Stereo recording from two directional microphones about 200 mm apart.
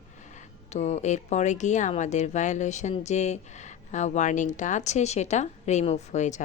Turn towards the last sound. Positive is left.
turn(degrees=35)  # may be behind; listen again after turning